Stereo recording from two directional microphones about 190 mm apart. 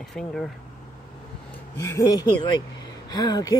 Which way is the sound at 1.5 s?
15° left (ahead or behind).